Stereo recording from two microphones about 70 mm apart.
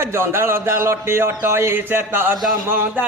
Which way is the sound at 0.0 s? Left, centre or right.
Right.